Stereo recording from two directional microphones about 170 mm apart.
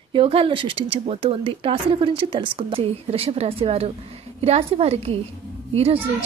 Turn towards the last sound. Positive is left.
turn(degrees=-35)  # may be behind; listen again after turning